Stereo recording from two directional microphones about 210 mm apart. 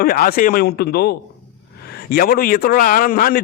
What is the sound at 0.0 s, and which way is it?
Speech, 45° left (ahead or behind).